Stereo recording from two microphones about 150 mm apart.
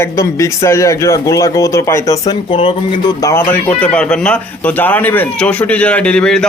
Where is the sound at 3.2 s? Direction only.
15° left (ahead or behind).